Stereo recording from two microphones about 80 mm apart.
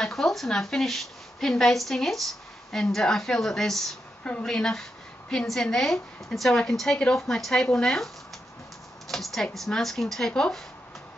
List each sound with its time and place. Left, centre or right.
0.0 s a woman's voice: centre
9.1 s a woman's voice: centre